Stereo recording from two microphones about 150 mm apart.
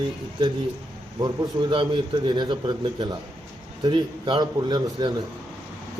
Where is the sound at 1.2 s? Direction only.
30° right (ahead or behind).